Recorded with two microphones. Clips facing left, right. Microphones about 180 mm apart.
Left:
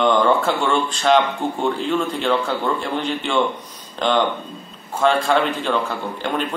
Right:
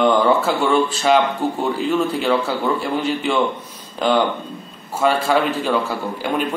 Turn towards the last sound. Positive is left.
turn(degrees=-5)  # may be behind; listen again after turning